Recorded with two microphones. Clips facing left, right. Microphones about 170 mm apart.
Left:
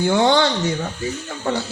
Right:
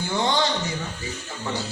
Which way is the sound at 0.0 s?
75° left (ahead or behind).